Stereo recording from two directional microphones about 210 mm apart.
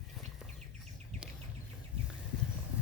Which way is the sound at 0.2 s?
Centre (ahead or behind).